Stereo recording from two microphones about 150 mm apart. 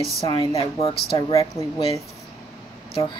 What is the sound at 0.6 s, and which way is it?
Speech, 40° left (ahead or behind).